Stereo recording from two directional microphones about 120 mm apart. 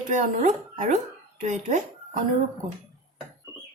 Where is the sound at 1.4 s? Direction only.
80° right.